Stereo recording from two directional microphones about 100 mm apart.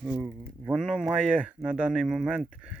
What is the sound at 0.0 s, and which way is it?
Speech, 10° right (ahead or behind).